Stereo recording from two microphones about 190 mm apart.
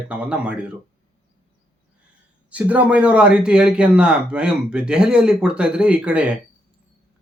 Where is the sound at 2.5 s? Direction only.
10° right (ahead or behind).